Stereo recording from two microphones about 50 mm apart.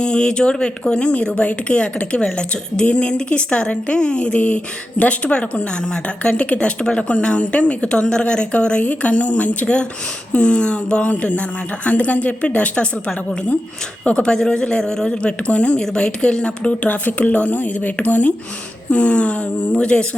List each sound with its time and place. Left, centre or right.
0.0 s speech: centre
16.8 s speech: left